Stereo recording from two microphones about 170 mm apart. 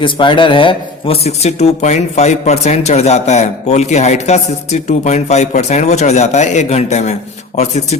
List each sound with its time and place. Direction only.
0.0 s speech: 30° left (ahead or behind)